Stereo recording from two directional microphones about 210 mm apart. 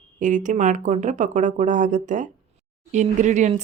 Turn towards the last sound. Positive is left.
turn(degrees=-35)  # may be behind; listen again after turning